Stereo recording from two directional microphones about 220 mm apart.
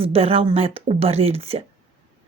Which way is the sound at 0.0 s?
25° right (ahead or behind).